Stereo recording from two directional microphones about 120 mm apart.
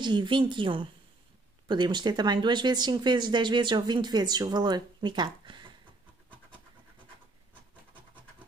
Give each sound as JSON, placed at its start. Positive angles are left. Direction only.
{"t": 0.0, "sound": "speech", "side_deg": -40}